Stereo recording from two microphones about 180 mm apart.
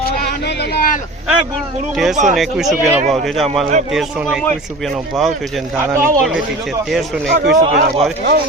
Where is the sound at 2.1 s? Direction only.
45° right (ahead or behind).